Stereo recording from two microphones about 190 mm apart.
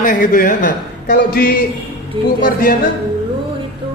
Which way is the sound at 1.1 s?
60° left (ahead or behind).